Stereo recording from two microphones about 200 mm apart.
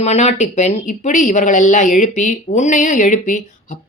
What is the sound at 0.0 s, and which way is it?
Speech, 35° left (ahead or behind).